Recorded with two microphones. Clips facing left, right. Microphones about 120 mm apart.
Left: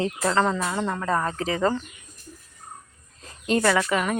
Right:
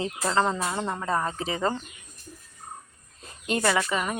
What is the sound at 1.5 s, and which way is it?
Speech, 25° right (ahead or behind).